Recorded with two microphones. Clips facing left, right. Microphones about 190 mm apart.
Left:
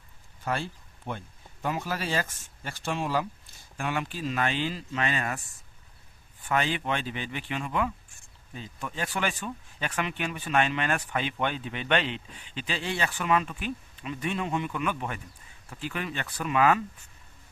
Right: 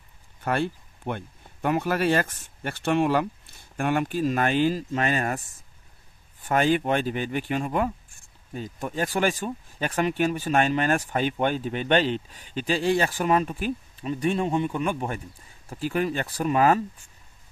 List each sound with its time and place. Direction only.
0.4 s speech: 60° right (ahead or behind); by 5.4 s 45° right (ahead or behind)
6.4 s speech: 45° right (ahead or behind)